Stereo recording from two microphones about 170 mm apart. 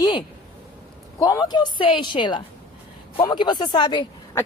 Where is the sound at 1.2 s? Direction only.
25° left (ahead or behind).